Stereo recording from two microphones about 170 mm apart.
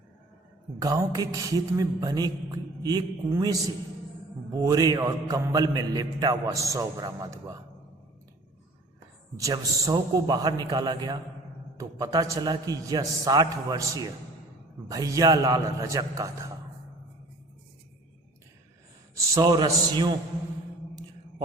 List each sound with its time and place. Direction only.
0.8 s a man's voice: 20° right (ahead or behind)
9.4 s a man's voice: 20° right (ahead or behind)
19.1 s a man's voice: 20° right (ahead or behind)